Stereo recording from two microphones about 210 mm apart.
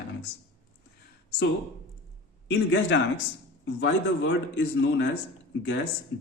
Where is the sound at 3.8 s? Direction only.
60° left (ahead or behind).